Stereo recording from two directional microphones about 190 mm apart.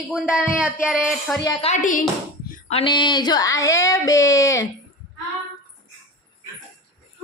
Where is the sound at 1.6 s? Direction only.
40° left (ahead or behind); by 4.7 s 15° left (ahead or behind).